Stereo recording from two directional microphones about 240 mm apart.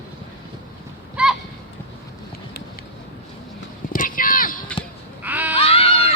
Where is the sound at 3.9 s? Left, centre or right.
Left.